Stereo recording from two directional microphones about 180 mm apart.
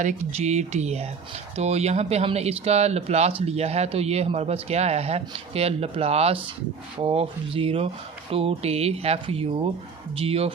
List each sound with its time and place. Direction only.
0.0 s speech: 40° right (ahead or behind)